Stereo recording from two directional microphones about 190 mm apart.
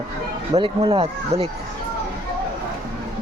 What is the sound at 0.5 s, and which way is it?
Speech, 35° right (ahead or behind).